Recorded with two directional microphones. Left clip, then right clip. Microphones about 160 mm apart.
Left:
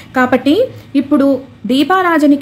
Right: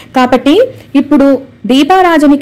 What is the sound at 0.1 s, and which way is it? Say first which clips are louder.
A woman's voice: right 4 dB; 25° right (ahead or behind).